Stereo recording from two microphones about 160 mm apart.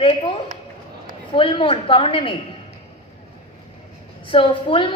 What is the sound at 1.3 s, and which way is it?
A woman's voice, 30° left (ahead or behind).